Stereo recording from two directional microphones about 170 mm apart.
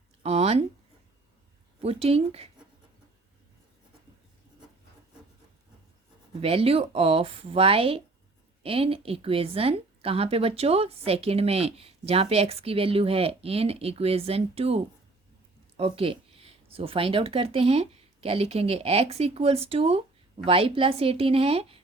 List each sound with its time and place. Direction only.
0.2 s a sound: 35° right (ahead or behind)
1.8 s a woman's voice: 35° right (ahead or behind)
6.4 s a woman's voice: 35° right (ahead or behind)
15.8 s a woman's voice: 35° right (ahead or behind)